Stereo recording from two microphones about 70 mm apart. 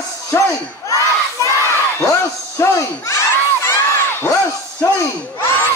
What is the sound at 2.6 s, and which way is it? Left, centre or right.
Crowd, left.